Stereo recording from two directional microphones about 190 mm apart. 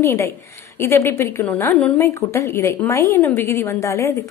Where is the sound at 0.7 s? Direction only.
15° left (ahead or behind).